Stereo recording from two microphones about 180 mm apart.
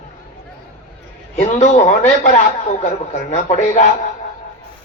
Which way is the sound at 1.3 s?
40° left (ahead or behind).